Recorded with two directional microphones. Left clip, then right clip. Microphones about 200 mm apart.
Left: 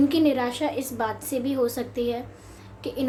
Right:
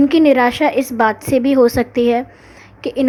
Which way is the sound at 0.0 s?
35° right (ahead or behind).